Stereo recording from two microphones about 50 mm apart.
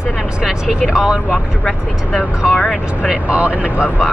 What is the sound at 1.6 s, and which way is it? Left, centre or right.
Speech, centre.